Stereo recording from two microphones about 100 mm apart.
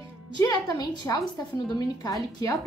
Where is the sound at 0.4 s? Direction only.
40° left (ahead or behind).